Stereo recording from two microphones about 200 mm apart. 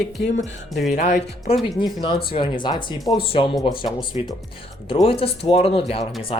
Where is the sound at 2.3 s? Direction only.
25° left (ahead or behind).